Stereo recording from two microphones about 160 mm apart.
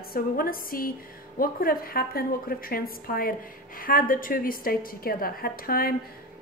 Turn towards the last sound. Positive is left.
turn(degrees=65)  # may be behind; listen again after turning